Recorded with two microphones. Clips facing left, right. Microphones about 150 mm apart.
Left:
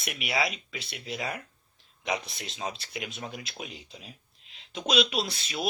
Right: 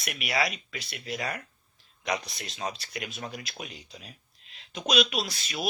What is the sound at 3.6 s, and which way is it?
Speech, centre (ahead or behind).